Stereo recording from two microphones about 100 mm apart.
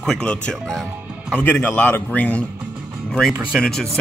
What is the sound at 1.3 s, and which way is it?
Speech, 20° left (ahead or behind).